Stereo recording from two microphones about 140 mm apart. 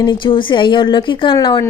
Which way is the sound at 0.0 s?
35° left (ahead or behind).